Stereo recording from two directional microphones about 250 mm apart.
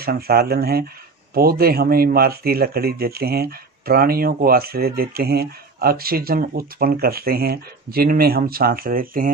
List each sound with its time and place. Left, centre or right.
0.0 s speech: right